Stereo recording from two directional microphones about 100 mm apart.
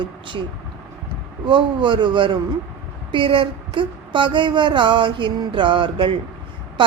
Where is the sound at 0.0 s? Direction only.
55° right (ahead or behind).